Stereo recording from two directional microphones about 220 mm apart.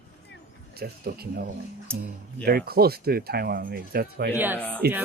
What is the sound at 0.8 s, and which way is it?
Speech, 45° right (ahead or behind).